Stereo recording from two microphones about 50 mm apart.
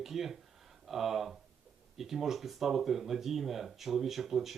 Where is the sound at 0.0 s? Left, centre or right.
Centre.